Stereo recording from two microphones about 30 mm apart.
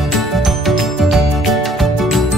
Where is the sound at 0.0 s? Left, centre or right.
Centre.